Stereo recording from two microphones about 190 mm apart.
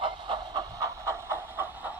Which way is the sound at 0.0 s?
25° right (ahead or behind).